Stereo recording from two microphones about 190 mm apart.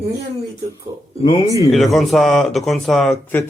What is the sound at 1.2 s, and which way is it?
Speech, 15° left (ahead or behind).